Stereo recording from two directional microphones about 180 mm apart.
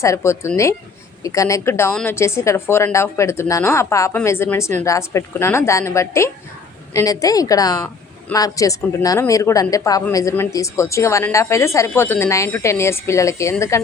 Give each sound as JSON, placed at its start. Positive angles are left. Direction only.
{"t": 0.0, "sound": "a woman's voice", "side_deg": 15}